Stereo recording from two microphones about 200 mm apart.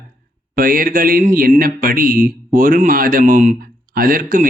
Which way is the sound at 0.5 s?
45° right (ahead or behind).